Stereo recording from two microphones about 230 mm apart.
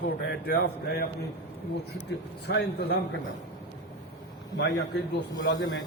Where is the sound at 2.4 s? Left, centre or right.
Left.